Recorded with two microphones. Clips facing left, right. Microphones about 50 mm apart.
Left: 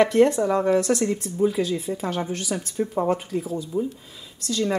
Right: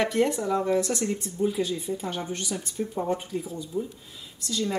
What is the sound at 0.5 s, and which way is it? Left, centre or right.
Speech, left.